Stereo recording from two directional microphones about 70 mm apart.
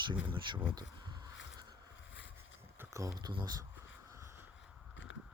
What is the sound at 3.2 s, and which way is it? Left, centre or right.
Speech, right.